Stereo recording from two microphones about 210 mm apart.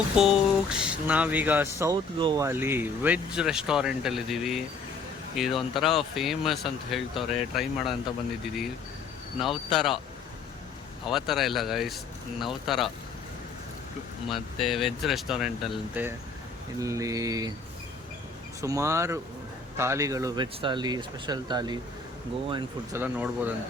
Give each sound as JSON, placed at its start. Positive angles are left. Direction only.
{"t": 0.2, "sound": "speech", "side_deg": -5}
{"t": 9.4, "sound": "speech", "side_deg": 0}
{"t": 11.0, "sound": "speech", "side_deg": 0}
{"t": 14.3, "sound": "speech", "side_deg": 0}
{"t": 16.8, "sound": "speech", "side_deg": -15}
{"t": 18.6, "sound": "speech", "side_deg": -15}
{"t": 23.0, "sound": "speech", "side_deg": -10}